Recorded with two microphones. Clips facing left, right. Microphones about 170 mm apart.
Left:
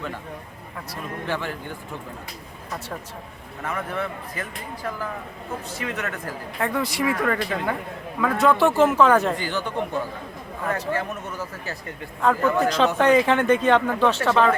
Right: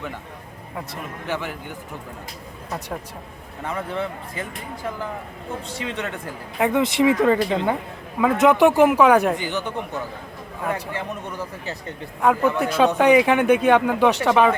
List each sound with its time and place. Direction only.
1.3 s speech: 15° right (ahead or behind)
3.6 s speech: 25° right (ahead or behind)
5.8 s speech: 25° right (ahead or behind)